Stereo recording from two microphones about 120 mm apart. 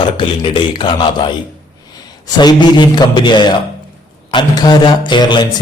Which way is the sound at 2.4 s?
40° left (ahead or behind).